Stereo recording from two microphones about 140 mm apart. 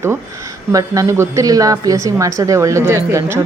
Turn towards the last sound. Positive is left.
turn(degrees=-20)  # may be behind; listen again after turning